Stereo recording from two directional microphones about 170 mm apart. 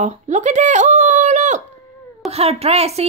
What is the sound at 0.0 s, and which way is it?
Speech, 45° right (ahead or behind).